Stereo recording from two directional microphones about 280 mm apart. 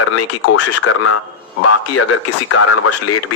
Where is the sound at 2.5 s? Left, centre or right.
Left.